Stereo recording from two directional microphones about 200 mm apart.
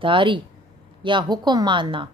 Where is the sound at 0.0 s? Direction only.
25° right (ahead or behind).